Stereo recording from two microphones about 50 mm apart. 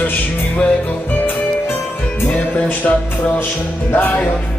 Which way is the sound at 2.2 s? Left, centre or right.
Left.